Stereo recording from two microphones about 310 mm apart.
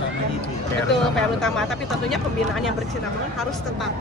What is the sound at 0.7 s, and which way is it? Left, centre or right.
Speech, centre.